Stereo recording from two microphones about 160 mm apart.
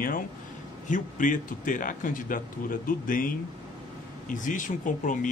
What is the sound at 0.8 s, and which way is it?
Speech, 55° left (ahead or behind).